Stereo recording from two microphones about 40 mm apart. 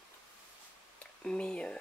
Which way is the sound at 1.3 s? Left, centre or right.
Left.